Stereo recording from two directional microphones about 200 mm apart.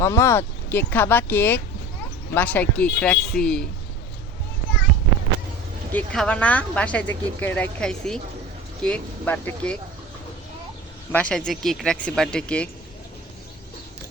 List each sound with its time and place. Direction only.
0.0 s speech: 15° left (ahead or behind)
5.9 s speech: 5° left (ahead or behind)
11.1 s speech: 5° left (ahead or behind)